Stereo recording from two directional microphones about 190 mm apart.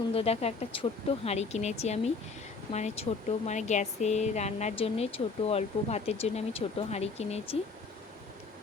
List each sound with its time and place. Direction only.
0.1 s speech: 30° left (ahead or behind)